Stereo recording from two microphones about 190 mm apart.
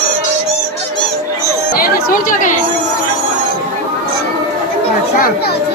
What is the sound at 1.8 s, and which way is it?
Chatter, 50° left (ahead or behind).